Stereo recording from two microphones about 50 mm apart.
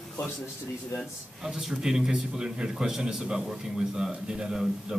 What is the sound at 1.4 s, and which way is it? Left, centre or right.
A man's voice, centre.